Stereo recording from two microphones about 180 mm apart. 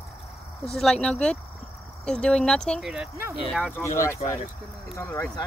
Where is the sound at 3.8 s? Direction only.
15° left (ahead or behind).